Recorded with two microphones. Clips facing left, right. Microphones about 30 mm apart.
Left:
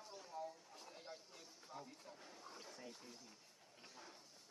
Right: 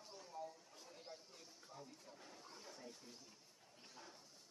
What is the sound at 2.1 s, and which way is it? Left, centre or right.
Speech, centre.